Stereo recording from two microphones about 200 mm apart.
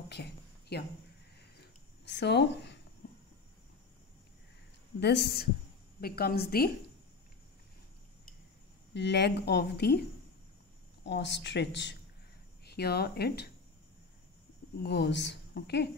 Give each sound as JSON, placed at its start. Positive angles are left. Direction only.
{"t": 0.1, "sound": "a sound", "side_deg": 55}
{"t": 2.0, "sound": "speech", "side_deg": 60}
{"t": 5.0, "sound": "speech", "side_deg": 55}
{"t": 8.9, "sound": "speech", "side_deg": 60}
{"t": 11.1, "sound": "speech", "side_deg": 60}
{"t": 14.8, "sound": "speech", "side_deg": 55}